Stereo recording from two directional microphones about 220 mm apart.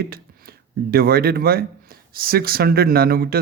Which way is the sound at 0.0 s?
45° right (ahead or behind).